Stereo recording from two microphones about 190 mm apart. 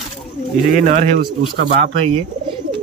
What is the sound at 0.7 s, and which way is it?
Speech, 40° right (ahead or behind).